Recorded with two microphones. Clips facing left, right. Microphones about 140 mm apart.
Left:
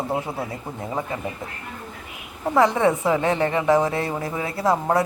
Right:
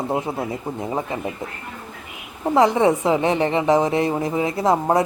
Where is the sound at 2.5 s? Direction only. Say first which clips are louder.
Right 2 dB; 20° right (ahead or behind).